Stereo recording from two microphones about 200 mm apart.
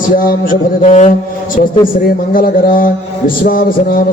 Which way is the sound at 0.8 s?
40° left (ahead or behind).